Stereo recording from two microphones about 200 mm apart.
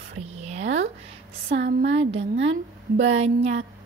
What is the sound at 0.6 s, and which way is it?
A woman's voice, 70° right (ahead or behind).